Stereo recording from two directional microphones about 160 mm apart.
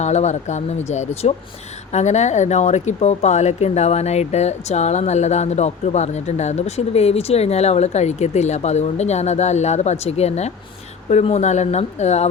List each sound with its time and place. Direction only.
0.0 s speech: 45° left (ahead or behind)